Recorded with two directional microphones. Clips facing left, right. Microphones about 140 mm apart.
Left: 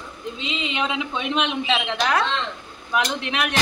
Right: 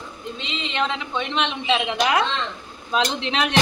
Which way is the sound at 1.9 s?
15° right (ahead or behind).